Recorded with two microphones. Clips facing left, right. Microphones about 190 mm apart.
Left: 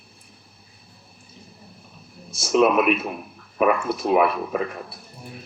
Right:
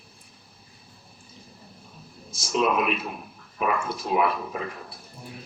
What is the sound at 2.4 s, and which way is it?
Speech, 60° left (ahead or behind).